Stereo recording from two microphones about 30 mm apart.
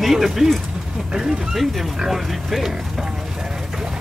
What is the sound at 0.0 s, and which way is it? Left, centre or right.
Speech, centre.